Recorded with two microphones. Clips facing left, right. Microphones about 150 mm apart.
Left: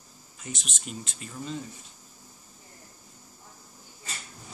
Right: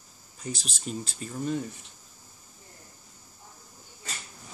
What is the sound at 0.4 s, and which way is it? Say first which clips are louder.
Speech: right 4 dB; 35° right (ahead or behind).